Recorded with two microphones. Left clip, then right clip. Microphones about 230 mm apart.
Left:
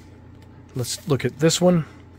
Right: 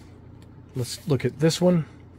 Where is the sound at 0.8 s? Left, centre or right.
Centre.